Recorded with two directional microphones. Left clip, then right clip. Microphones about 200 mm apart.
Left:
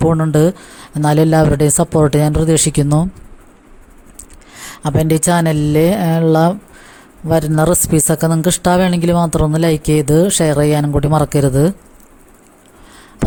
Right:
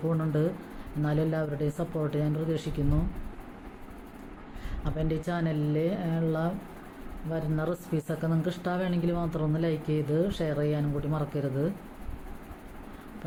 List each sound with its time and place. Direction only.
0.1 s speech: 50° left (ahead or behind)
4.8 s speech: 55° left (ahead or behind)